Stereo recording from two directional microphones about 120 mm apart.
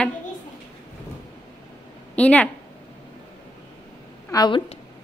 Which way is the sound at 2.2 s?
10° left (ahead or behind).